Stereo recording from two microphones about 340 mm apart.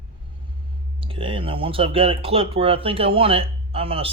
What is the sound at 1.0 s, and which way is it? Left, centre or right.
A man's voice, centre.